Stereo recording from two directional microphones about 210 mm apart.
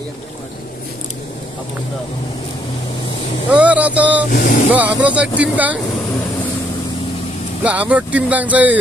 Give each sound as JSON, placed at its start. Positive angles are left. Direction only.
{"t": 3.5, "sound": "speech", "side_deg": -5}
{"t": 4.3, "sound": "speech", "side_deg": 45}
{"t": 4.7, "sound": "speech", "side_deg": -5}
{"t": 7.6, "sound": "speech", "side_deg": -5}